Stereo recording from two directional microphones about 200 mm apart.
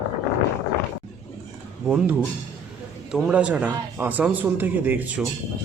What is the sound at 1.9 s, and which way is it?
A man's voice, 5° right (ahead or behind).